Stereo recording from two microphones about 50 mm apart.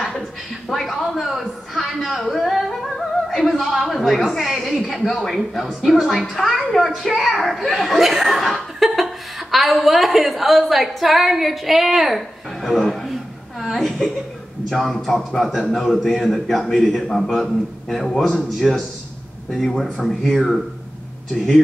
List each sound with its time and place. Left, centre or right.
0.7 s a man's voice: centre
13.1 s a sound: centre
14.7 s a man's voice: centre